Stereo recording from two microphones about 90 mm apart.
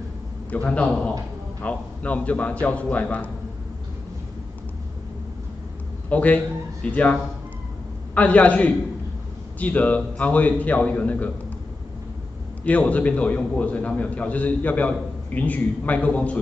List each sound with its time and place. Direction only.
0.5 s a man's voice: 15° left (ahead or behind)
6.0 s a man's voice: 15° left (ahead or behind)
12.6 s a man's voice: 15° left (ahead or behind)